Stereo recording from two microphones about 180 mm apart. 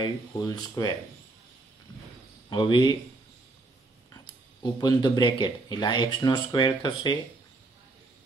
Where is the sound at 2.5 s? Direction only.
25° left (ahead or behind).